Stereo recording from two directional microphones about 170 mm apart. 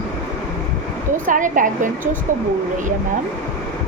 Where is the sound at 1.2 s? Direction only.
50° right (ahead or behind).